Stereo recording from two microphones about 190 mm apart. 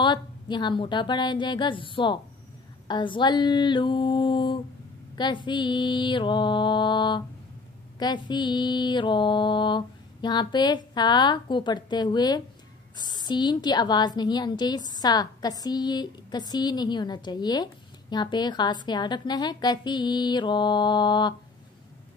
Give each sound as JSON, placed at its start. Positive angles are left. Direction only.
{"t": 0.0, "sound": "a woman's voice", "side_deg": 25}